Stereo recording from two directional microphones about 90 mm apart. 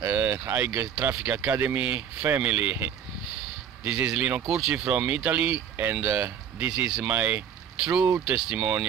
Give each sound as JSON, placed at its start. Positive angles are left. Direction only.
{"t": 0.0, "sound": "speech", "side_deg": -20}